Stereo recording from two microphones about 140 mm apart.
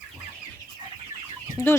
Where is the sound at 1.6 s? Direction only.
15° left (ahead or behind).